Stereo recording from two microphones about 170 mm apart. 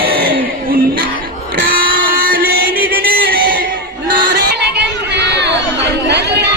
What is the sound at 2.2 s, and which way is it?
Music, 60° right (ahead or behind).